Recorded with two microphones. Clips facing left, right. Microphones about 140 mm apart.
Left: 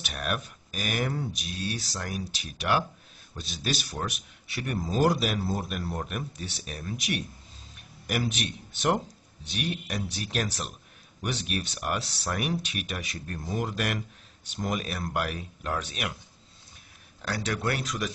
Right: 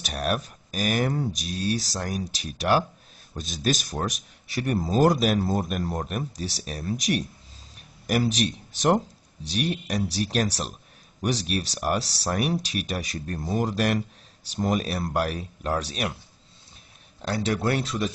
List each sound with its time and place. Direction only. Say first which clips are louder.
0.0 s speech: right 5 dB; 35° right (ahead or behind)
17.2 s speech: right 5 dB; 25° right (ahead or behind)